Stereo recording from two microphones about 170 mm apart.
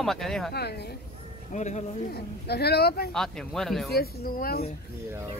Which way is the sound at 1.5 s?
45° left (ahead or behind).